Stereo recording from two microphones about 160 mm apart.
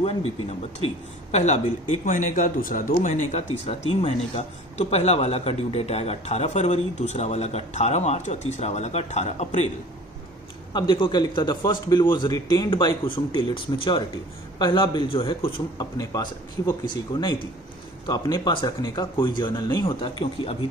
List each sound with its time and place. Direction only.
0.0 s a man's voice: 40° left (ahead or behind)
10.7 s a man's voice: 25° left (ahead or behind)
16.0 s a man's voice: 20° left (ahead or behind)